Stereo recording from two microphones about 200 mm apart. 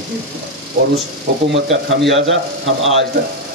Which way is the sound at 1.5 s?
70° right (ahead or behind).